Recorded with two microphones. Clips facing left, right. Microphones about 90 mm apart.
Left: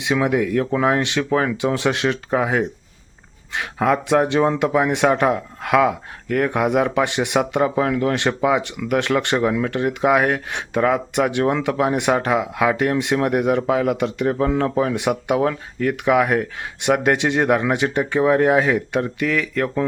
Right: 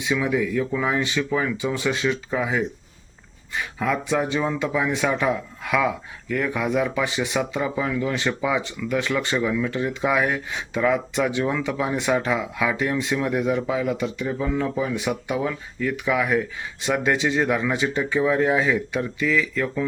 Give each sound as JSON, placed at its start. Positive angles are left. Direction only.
{"t": 0.0, "sound": "speech", "side_deg": 65}